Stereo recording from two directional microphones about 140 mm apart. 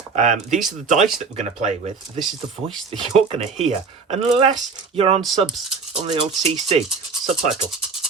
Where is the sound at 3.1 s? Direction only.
50° right (ahead or behind).